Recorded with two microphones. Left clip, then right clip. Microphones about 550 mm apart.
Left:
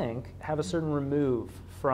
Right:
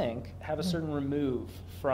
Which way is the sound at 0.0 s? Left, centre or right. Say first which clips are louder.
Even; left.